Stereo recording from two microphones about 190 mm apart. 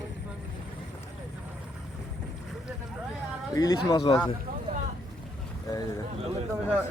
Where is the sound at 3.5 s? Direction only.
20° left (ahead or behind).